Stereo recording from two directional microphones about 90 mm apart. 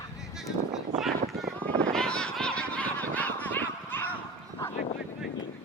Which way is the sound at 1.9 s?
10° left (ahead or behind).